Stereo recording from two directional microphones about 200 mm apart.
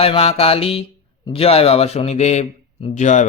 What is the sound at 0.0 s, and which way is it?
Mantra, 30° left (ahead or behind).